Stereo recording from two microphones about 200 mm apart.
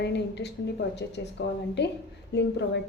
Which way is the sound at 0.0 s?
60° left (ahead or behind).